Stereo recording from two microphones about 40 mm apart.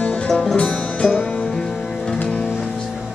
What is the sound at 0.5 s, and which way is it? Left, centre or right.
Music, left.